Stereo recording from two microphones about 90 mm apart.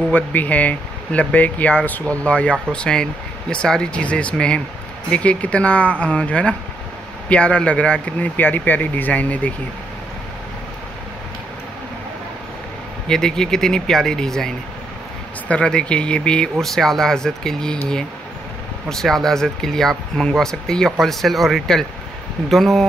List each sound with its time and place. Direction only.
0.1 s speech: 20° left (ahead or behind)
13.1 s speech: 5° left (ahead or behind)
18.9 s speech: 5° left (ahead or behind)